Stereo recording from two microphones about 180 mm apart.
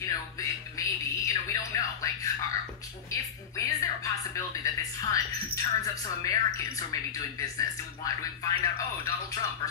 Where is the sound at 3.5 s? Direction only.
20° left (ahead or behind).